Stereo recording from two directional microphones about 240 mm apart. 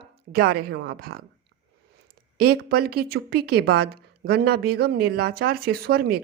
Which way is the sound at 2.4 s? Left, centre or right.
Right.